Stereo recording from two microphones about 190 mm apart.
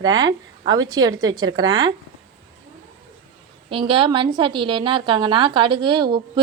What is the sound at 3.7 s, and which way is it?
A woman's voice, 25° right (ahead or behind).